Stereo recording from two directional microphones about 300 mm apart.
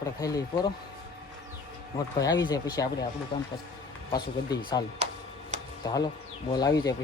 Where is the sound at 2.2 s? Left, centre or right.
Centre.